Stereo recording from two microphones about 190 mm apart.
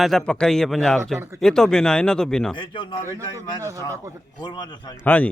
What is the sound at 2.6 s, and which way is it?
Speech, 25° left (ahead or behind).